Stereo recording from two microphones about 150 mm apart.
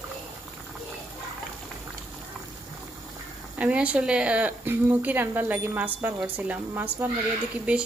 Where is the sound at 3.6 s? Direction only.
10° right (ahead or behind).